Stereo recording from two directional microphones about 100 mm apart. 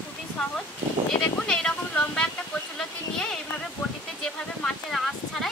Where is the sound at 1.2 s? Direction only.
10° left (ahead or behind).